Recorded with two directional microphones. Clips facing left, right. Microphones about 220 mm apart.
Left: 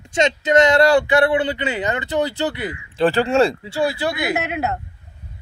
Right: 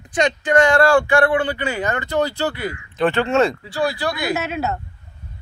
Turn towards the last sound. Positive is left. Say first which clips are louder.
# even
turn(degrees=15)  # may be behind; listen again after turning